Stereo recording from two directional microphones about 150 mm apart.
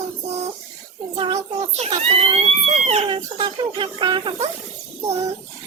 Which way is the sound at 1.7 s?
40° right (ahead or behind).